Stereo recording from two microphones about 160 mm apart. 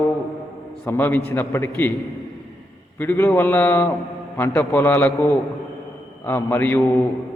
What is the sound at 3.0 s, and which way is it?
A man's voice, 15° left (ahead or behind).